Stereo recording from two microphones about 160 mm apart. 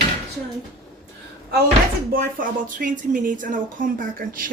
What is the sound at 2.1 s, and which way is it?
Speech, 55° right (ahead or behind).